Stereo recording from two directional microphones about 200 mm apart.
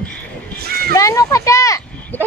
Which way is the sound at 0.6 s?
50° right (ahead or behind).